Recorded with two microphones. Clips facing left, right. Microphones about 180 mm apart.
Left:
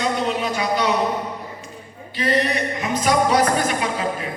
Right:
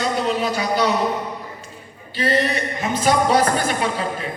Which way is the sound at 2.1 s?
30° right (ahead or behind).